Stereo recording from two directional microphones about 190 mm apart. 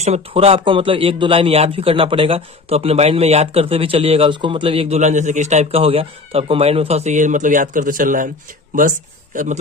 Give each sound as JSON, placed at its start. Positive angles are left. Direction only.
{"t": 0.0, "sound": "a man's voice", "side_deg": -35}
{"t": 9.3, "sound": "speech", "side_deg": -40}